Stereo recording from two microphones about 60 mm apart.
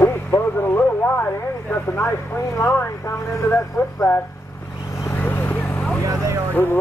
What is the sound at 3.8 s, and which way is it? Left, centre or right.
Speech, left.